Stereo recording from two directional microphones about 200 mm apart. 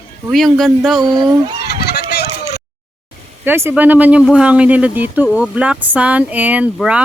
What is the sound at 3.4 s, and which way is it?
Speech, 10° right (ahead or behind).